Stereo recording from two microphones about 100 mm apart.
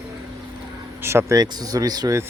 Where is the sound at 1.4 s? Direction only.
40° right (ahead or behind).